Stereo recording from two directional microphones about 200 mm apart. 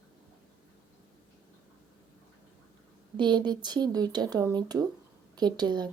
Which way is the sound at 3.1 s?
20° right (ahead or behind).